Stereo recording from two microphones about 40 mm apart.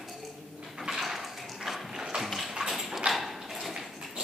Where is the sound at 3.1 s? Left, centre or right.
Centre.